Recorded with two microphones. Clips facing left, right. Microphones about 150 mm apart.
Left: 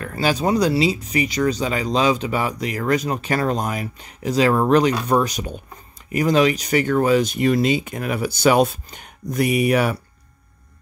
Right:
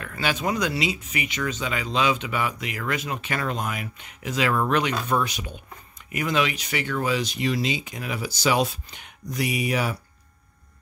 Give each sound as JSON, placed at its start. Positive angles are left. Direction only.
{"t": 0.0, "sound": "speech", "side_deg": 35}